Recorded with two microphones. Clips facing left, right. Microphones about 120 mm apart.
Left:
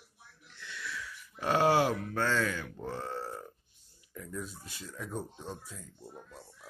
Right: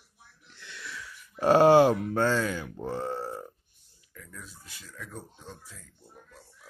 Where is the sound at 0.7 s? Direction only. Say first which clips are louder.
Left 1 dB; 30° right (ahead or behind).